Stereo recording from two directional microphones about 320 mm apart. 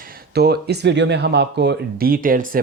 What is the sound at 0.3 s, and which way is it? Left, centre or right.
Speech, right.